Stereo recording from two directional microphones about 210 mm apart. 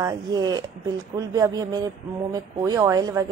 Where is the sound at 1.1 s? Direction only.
15° right (ahead or behind).